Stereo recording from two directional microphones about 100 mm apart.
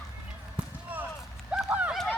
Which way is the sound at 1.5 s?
10° right (ahead or behind).